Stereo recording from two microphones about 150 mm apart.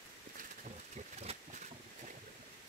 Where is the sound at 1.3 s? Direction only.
40° right (ahead or behind).